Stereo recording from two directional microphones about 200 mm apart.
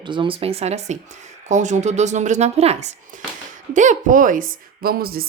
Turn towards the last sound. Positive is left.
turn(degrees=-50)  # may be behind; listen again after turning